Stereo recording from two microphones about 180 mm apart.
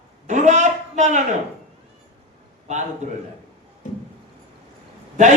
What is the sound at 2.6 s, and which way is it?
Speech, 40° right (ahead or behind).